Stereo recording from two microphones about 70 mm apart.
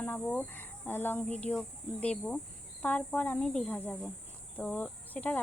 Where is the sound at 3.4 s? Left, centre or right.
Centre.